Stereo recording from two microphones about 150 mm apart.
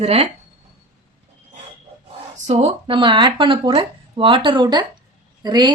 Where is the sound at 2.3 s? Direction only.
45° right (ahead or behind).